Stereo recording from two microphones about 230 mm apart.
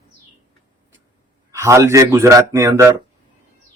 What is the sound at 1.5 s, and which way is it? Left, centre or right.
Speech, centre.